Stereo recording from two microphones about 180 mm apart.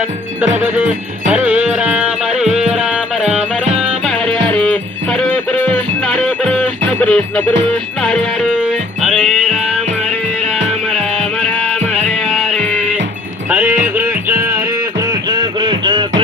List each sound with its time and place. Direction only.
1.3 s music: 10° right (ahead or behind); by 7.5 s 5° left (ahead or behind)
8.0 s speech: 5° left (ahead or behind)
8.4 s music: 5° right (ahead or behind)
13.5 s a sound: 10° right (ahead or behind)
13.9 s music: 10° right (ahead or behind)
15.3 s a sound: 25° right (ahead or behind)